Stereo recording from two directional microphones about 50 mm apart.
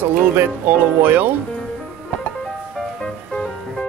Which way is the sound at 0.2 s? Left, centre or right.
Right.